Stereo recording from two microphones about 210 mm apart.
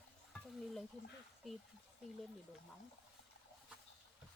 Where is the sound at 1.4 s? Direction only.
Centre (ahead or behind).